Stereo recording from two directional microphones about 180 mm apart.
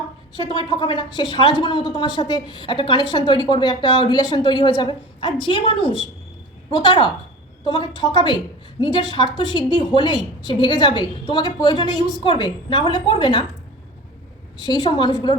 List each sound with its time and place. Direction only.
0.3 s a woman's voice: 25° left (ahead or behind)
14.6 s a woman's voice: 25° left (ahead or behind)